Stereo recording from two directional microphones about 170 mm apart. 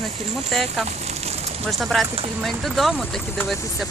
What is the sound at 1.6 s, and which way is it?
Speech, centre (ahead or behind).